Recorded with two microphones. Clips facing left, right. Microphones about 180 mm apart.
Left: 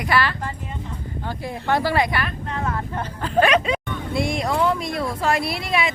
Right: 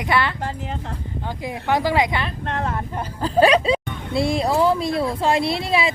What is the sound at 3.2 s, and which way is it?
Speech, 35° right (ahead or behind).